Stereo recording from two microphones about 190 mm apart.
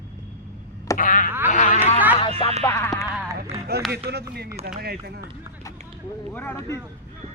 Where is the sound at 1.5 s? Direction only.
40° left (ahead or behind).